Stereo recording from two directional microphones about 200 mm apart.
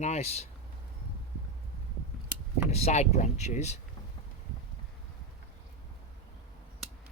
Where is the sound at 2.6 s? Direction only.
35° left (ahead or behind).